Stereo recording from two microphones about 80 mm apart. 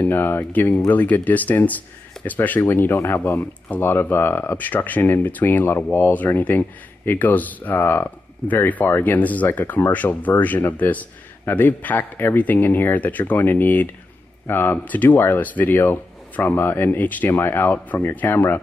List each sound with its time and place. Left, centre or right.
0.0 s speech: left